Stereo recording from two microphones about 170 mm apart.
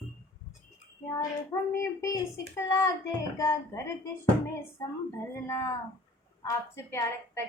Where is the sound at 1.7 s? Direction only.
15° left (ahead or behind).